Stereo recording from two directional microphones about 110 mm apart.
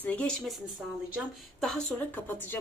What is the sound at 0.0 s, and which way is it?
Speech, 10° left (ahead or behind).